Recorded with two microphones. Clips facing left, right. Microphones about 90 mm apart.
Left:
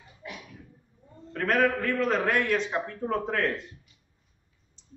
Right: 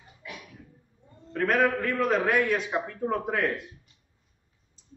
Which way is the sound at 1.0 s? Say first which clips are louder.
Right 2 dB; centre (ahead or behind).